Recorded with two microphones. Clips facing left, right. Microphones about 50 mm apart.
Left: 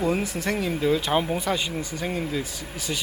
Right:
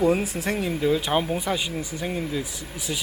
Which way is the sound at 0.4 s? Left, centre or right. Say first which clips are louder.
Even; centre.